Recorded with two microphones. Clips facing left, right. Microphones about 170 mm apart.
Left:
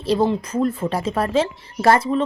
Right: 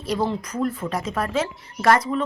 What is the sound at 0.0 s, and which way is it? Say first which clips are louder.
A woman's voice: left 5 dB; 30° left (ahead or behind).